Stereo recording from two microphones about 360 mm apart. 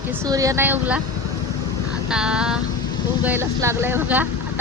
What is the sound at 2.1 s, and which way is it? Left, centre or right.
Speech, centre.